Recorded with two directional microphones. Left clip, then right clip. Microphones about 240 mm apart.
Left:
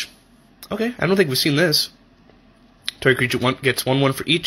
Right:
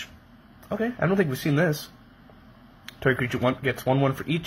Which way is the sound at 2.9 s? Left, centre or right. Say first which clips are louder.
Left 7 dB; left.